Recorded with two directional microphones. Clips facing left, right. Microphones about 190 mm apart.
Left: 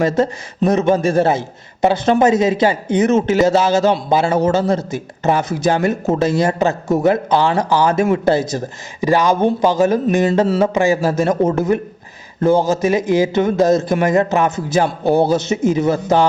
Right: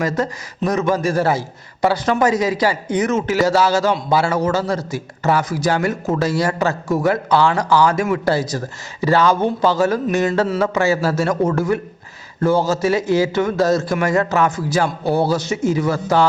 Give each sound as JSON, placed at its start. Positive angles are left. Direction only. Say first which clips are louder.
{"t": 0.0, "sound": "a man's voice", "louder": "left 5 dB", "side_deg": 25}